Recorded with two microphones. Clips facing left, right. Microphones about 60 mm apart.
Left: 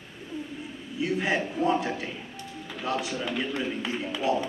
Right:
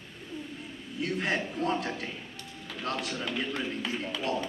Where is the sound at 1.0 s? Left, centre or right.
Centre.